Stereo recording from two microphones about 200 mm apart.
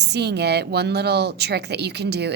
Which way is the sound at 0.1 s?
55° right (ahead or behind).